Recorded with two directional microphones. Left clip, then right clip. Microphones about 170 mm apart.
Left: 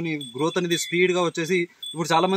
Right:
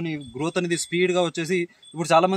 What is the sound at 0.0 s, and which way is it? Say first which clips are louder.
Speech: left 3 dB; 30° right (ahead or behind).